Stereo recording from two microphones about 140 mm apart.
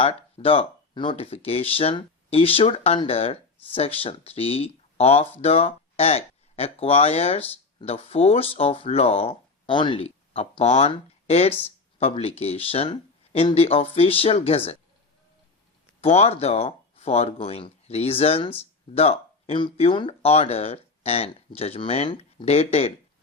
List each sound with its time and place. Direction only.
0.0 s speech: 45° left (ahead or behind)
16.0 s speech: 45° left (ahead or behind)